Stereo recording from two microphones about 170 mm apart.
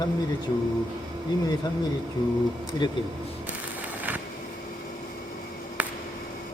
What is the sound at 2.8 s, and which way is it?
Speech, 25° left (ahead or behind).